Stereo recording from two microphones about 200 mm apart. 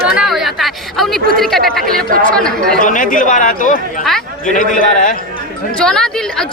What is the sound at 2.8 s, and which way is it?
A man's voice, 40° left (ahead or behind).